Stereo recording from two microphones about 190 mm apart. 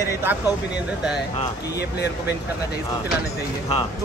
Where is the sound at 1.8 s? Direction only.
60° left (ahead or behind).